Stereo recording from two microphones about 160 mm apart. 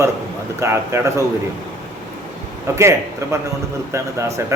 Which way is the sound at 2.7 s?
20° right (ahead or behind).